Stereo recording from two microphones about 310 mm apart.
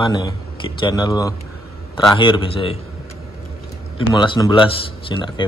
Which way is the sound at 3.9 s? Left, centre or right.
Centre.